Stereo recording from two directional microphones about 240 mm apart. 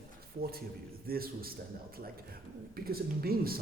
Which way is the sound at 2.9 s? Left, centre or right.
Right.